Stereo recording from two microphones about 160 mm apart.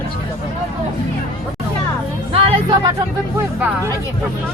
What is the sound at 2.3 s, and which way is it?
Music, 30° right (ahead or behind).